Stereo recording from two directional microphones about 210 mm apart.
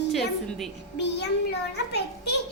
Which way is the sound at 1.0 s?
55° left (ahead or behind).